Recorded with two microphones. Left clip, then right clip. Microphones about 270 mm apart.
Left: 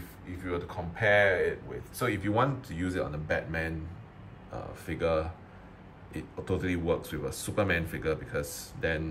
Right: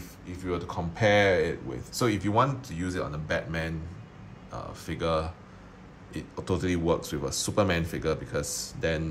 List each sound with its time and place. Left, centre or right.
0.3 s speech: centre
2.3 s speech: centre